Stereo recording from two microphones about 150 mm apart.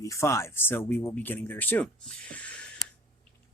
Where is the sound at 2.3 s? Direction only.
10° left (ahead or behind).